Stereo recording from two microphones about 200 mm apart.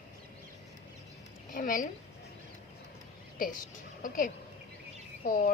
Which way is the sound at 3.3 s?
40° left (ahead or behind).